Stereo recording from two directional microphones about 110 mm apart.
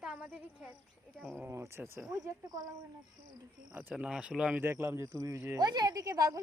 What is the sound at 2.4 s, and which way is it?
Speech, 40° right (ahead or behind).